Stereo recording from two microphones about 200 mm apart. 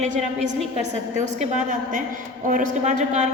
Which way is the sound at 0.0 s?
35° right (ahead or behind).